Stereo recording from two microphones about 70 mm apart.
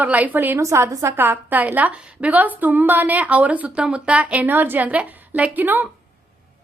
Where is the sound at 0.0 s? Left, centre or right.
Right.